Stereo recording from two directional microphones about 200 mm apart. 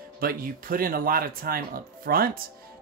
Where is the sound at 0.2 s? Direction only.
45° right (ahead or behind).